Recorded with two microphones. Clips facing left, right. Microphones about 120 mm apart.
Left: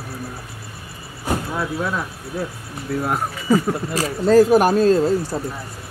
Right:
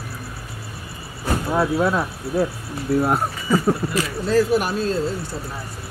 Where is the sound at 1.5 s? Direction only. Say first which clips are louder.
Right 5 dB; 40° right (ahead or behind).